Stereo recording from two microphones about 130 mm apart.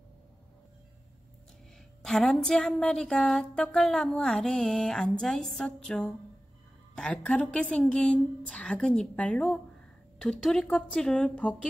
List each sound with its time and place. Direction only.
2.0 s a woman's voice: 5° left (ahead or behind)